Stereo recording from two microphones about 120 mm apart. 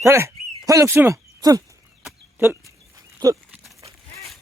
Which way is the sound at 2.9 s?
25° right (ahead or behind).